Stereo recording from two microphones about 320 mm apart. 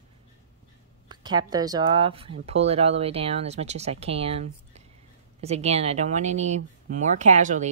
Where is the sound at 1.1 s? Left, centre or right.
Centre.